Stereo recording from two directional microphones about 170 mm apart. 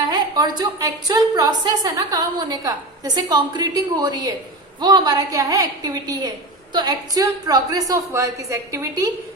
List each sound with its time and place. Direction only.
0.1 s a woman's voice: 25° right (ahead or behind)